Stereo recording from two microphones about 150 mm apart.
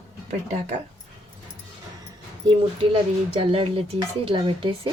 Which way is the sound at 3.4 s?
40° right (ahead or behind).